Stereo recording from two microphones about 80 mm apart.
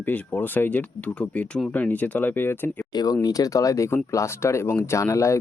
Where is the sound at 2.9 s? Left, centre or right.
Left.